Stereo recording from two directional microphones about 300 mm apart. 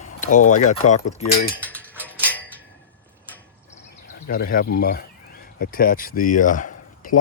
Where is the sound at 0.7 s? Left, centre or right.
Left.